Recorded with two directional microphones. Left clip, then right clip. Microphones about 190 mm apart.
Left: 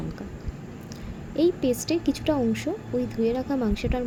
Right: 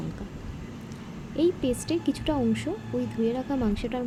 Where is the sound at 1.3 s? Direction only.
5° left (ahead or behind).